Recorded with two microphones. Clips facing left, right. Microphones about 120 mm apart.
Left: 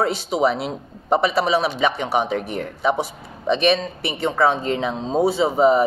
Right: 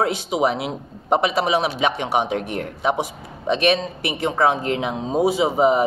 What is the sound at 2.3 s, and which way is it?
Speech, 65° right (ahead or behind).